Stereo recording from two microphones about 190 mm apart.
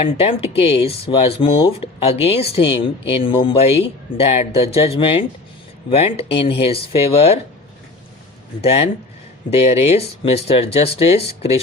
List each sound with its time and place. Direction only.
0.0 s speech: 30° left (ahead or behind)
8.6 s speech: 35° left (ahead or behind)